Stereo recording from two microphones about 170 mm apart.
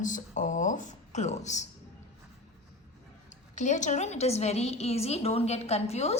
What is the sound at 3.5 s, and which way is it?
A woman's voice, 45° left (ahead or behind).